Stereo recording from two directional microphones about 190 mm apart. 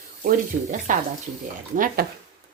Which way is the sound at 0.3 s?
45° right (ahead or behind).